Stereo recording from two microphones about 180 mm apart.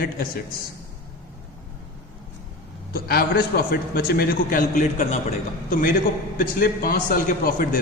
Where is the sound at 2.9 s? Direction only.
60° left (ahead or behind).